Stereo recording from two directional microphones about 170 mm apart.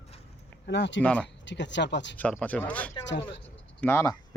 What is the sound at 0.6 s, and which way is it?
Speech, 90° left.